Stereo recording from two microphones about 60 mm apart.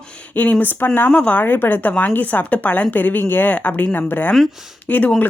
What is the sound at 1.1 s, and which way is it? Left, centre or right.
Speech, left.